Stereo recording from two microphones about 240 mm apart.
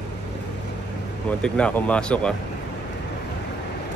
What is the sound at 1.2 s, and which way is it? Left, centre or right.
Speech, centre.